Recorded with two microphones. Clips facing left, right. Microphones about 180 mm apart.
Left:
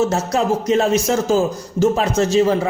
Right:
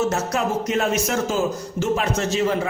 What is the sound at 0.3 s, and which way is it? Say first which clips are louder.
A man's voice: left 8 dB; 30° left (ahead or behind).